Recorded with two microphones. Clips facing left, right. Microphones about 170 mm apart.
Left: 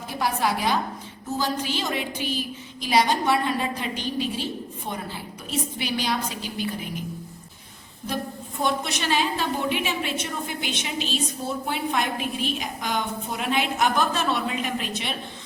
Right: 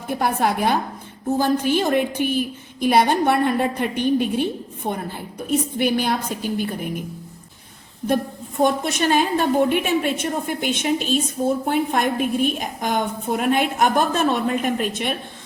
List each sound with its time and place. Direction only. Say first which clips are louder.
0.1 s a woman's voice: right 4 dB; 55° right (ahead or behind)
8.0 s a woman's voice: right 8 dB; 50° right (ahead or behind)